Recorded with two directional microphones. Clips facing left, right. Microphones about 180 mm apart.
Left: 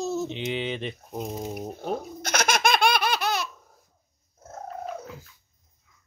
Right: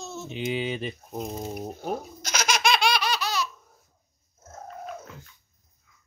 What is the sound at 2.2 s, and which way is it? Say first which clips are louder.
Laughter: left 2 dB; 55° left (ahead or behind).